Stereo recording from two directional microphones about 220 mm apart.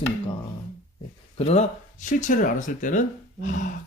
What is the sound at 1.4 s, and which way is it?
Speech, 30° left (ahead or behind).